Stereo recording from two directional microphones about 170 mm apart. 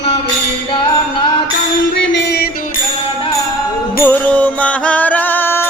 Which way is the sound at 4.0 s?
10° left (ahead or behind).